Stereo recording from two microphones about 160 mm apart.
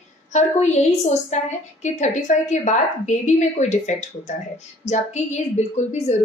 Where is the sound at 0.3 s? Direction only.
45° left (ahead or behind).